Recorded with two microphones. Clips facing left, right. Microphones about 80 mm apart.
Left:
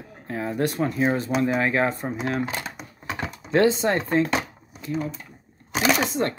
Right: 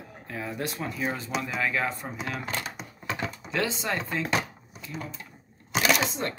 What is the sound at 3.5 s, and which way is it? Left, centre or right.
Speech, left.